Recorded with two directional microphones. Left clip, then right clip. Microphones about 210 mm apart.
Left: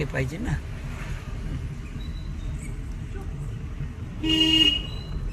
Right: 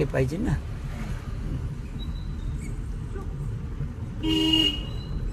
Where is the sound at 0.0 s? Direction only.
40° right (ahead or behind).